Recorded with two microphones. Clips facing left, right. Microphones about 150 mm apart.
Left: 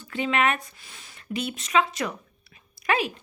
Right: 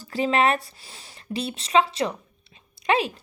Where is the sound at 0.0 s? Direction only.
35° right (ahead or behind).